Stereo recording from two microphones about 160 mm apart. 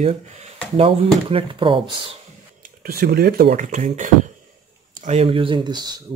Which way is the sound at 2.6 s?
70° right (ahead or behind).